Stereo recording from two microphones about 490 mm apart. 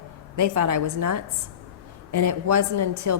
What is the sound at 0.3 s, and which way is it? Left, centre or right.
A woman's voice, right.